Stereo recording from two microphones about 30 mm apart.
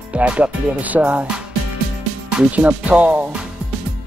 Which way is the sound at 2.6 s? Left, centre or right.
Right.